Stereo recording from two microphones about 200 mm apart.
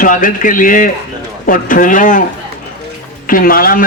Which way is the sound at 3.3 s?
45° left (ahead or behind).